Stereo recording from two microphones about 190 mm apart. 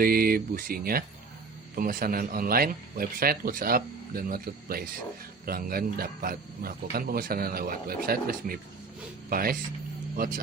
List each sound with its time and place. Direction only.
0.0 s speech: 50° right (ahead or behind)